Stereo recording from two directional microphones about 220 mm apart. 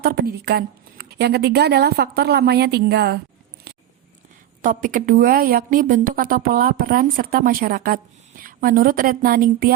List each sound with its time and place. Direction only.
0.0 s speech: 45° right (ahead or behind)
3.7 s a sound: 45° right (ahead or behind)
4.6 s a woman's voice: 35° right (ahead or behind)